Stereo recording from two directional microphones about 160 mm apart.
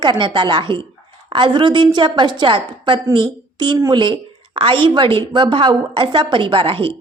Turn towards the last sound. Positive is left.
turn(degrees=-35)  # may be behind; listen again after turning